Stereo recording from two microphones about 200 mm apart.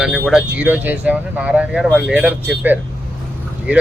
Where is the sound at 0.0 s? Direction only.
Centre (ahead or behind).